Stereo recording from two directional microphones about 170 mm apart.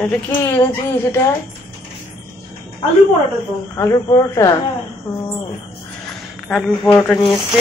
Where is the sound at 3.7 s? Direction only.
15° left (ahead or behind).